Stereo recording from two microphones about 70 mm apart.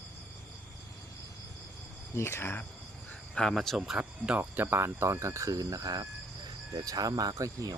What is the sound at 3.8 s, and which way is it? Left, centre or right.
Speech, centre.